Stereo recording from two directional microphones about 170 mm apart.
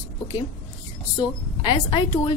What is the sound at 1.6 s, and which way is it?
Speech, 30° left (ahead or behind).